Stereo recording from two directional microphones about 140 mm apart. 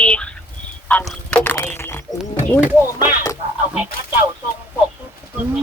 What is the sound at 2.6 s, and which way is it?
Speech, 15° right (ahead or behind).